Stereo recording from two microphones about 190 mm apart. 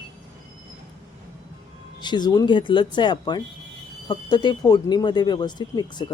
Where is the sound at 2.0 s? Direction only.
25° left (ahead or behind).